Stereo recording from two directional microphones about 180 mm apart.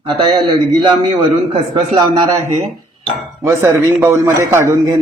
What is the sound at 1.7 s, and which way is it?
Speech, 25° right (ahead or behind).